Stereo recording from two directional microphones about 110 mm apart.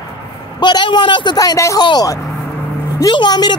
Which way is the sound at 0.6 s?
45° left (ahead or behind).